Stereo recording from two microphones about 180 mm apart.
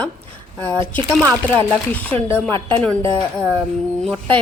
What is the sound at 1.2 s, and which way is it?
Speech, 15° right (ahead or behind).